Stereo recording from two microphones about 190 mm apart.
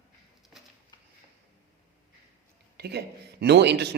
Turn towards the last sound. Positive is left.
turn(degrees=-60)  # may be behind; listen again after turning